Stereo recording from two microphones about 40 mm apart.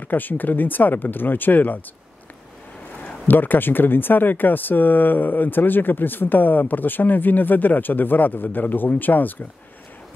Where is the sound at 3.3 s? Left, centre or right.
Left.